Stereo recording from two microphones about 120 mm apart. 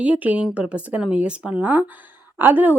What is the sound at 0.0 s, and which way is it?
Speech, 10° right (ahead or behind).